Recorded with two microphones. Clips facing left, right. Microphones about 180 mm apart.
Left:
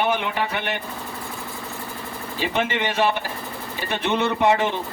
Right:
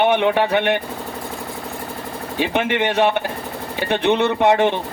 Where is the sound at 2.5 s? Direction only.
65° right (ahead or behind).